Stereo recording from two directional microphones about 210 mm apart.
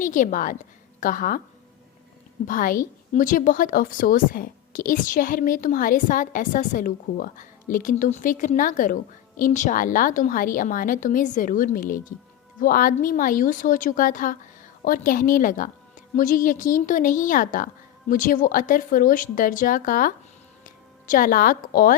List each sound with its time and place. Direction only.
0.0 s a woman's voice: 40° left (ahead or behind)
2.5 s a woman's voice: 40° left (ahead or behind)